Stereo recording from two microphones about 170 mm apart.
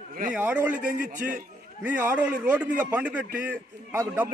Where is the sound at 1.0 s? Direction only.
50° right (ahead or behind).